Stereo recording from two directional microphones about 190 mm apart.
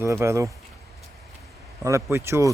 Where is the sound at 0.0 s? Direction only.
15° right (ahead or behind).